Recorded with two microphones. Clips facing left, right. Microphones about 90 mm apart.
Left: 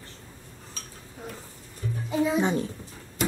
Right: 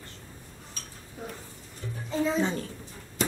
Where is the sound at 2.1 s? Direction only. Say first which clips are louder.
Left 3 dB; 15° left (ahead or behind).